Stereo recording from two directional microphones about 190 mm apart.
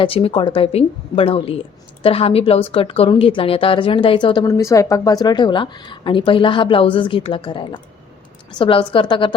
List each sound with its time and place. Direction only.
0.0 s a woman's voice: 30° left (ahead or behind)